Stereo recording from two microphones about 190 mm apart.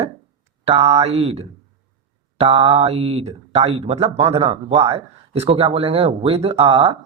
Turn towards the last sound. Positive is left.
turn(degrees=-30)  # may be behind; listen again after turning